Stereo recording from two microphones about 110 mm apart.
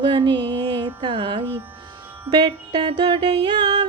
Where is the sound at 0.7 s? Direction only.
55° right (ahead or behind).